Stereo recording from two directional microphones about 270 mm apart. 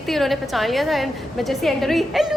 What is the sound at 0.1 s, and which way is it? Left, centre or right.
A woman's voice, centre.